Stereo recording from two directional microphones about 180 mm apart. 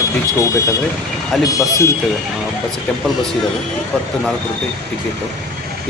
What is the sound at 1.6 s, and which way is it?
Speech, 20° left (ahead or behind).